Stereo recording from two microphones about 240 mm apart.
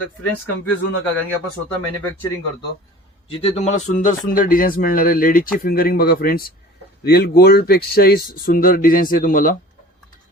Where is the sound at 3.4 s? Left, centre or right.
Left.